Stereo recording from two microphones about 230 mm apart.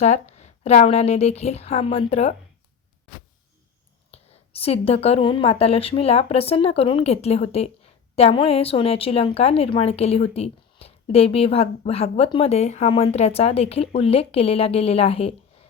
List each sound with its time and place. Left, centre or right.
0.0 s speech: left
4.1 s speech: left